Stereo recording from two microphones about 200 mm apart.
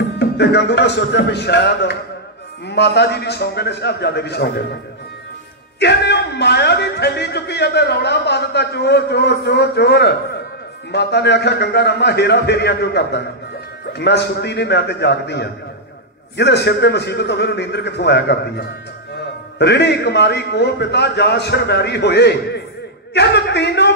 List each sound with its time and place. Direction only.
0.2 s a man's voice: 60° left (ahead or behind)
5.8 s a man's voice: 55° left (ahead or behind)